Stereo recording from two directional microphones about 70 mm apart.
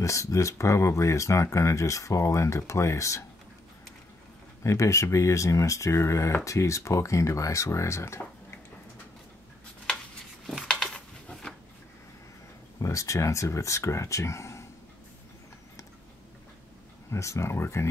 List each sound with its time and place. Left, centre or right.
0.0 s speech: left
4.6 s speech: left
10.6 s coin: centre
12.8 s speech: left
17.1 s speech: left